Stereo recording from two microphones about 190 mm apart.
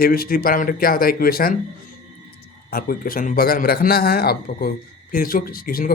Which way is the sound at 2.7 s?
50° left (ahead or behind).